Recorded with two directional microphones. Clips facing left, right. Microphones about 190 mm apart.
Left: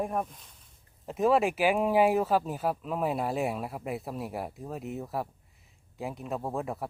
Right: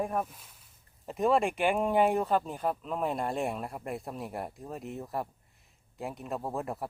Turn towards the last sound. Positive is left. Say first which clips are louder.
# left 1 dB
turn(degrees=0)  # may be behind; listen again after turning